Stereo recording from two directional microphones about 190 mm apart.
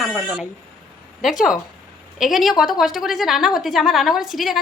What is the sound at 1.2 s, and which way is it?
A woman's voice, centre (ahead or behind).